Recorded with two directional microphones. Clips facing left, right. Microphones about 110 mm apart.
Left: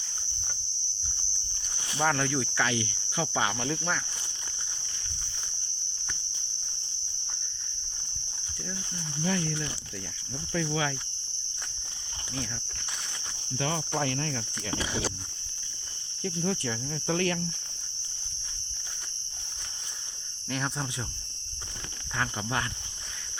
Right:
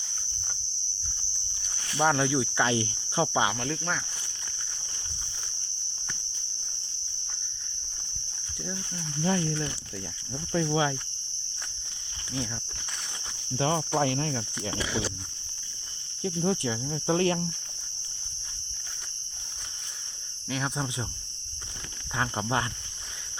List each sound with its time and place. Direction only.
2.0 s cricket: 15° right (ahead or behind)
2.6 s cricket: 30° right (ahead or behind)
3.6 s cricket: centre (ahead or behind)
9.2 s insect: 30° right (ahead or behind)
13.6 s insect: 30° right (ahead or behind)
16.2 s insect: 20° right (ahead or behind)